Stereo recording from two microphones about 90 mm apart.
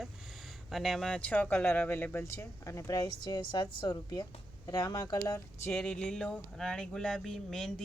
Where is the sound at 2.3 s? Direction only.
30° left (ahead or behind).